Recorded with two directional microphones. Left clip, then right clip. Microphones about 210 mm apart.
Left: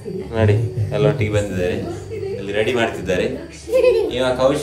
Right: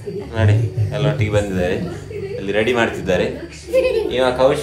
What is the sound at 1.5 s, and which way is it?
A man's voice, 20° right (ahead or behind).